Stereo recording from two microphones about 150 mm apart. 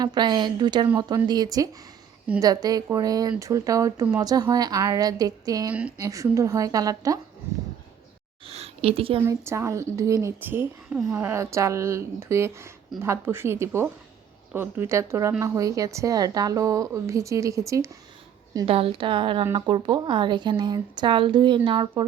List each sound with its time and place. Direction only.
0.0 s a woman's voice: 30° right (ahead or behind)
7.4 s a sound: 15° right (ahead or behind)
8.4 s a woman's voice: 40° right (ahead or behind)
9.2 s a woman's voice: 20° right (ahead or behind)
18.6 s a woman's voice: 40° right (ahead or behind)